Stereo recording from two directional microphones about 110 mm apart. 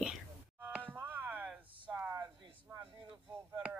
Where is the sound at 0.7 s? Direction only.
15° right (ahead or behind).